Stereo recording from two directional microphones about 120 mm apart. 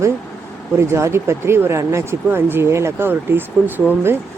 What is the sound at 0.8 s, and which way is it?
Speech, 25° right (ahead or behind).